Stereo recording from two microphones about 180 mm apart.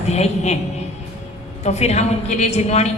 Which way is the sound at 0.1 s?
40° left (ahead or behind).